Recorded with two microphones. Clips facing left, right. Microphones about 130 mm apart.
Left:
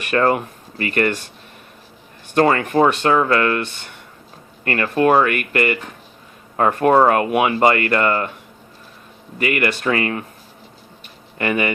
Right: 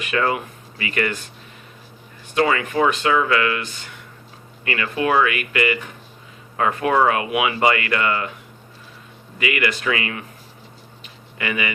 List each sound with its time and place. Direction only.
0.1 s speech: 45° left (ahead or behind)
2.3 s speech: 45° left (ahead or behind)
4.6 s speech: 45° left (ahead or behind)
9.4 s speech: 45° left (ahead or behind)
11.3 s speech: 45° left (ahead or behind)